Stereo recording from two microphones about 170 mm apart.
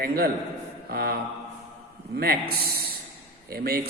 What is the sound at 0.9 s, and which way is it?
Mantra, 65° right (ahead or behind).